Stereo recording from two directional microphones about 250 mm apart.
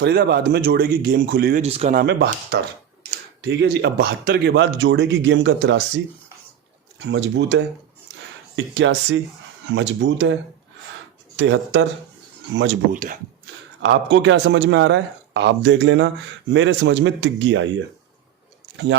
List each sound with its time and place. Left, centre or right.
0.0 s speech: right
1.6 s speech: right
2.0 s speech: right
7.1 s speech: right
11.3 s speech: right
12.9 s speech: right
13.8 s speech: right